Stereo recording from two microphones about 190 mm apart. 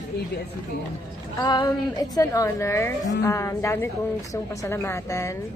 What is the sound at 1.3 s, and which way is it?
A woman's voice, 20° left (ahead or behind).